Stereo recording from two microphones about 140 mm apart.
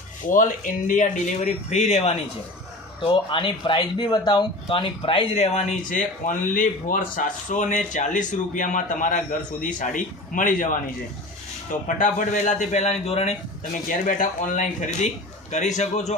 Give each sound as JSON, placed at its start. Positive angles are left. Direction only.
{"t": 0.3, "sound": "speech", "side_deg": 70}
{"t": 3.0, "sound": "speech", "side_deg": 35}
{"t": 5.9, "sound": "speech", "side_deg": 70}
{"t": 11.9, "sound": "speech", "side_deg": 65}
{"t": 14.0, "sound": "speech", "side_deg": 65}